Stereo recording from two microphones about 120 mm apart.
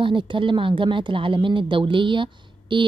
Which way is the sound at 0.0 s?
45° right (ahead or behind).